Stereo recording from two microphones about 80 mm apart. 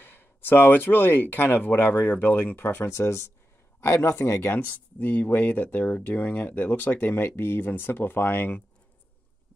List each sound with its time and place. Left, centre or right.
0.0 s speech: left